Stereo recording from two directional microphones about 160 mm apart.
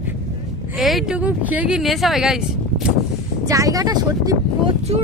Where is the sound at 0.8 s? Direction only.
Centre (ahead or behind).